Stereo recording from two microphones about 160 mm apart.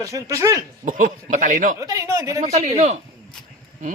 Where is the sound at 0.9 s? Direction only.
55° right (ahead or behind).